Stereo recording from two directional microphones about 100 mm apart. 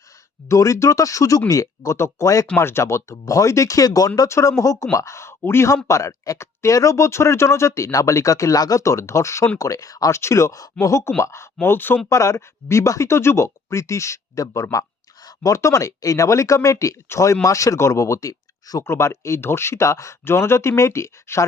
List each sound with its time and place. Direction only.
0.4 s speech: 30° left (ahead or behind)